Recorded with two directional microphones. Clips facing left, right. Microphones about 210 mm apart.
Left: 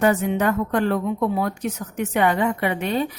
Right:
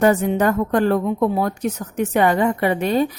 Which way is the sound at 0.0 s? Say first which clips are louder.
Right 3 dB; 35° right (ahead or behind).